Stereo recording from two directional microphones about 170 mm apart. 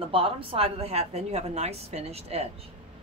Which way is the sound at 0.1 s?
35° right (ahead or behind).